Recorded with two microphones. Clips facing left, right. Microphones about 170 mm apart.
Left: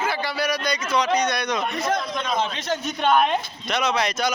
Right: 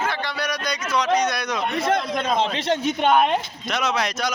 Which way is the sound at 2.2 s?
30° right (ahead or behind).